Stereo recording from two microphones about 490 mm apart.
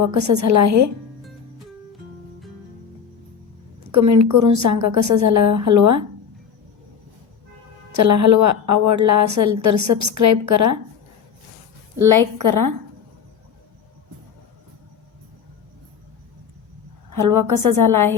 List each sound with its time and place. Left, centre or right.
0.0 s a woman's voice: right
3.8 s a woman's voice: right
7.9 s a woman's voice: right
11.9 s a woman's voice: right
17.1 s a woman's voice: right